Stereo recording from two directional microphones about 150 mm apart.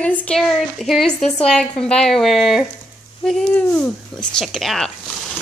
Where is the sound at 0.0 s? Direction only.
10° left (ahead or behind).